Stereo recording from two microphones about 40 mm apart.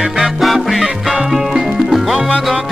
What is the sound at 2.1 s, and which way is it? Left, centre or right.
Music, right.